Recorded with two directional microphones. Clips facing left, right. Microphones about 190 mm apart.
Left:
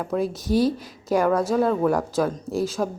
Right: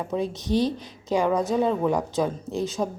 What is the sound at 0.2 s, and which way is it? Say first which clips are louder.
Speech: left 3 dB; 5° left (ahead or behind).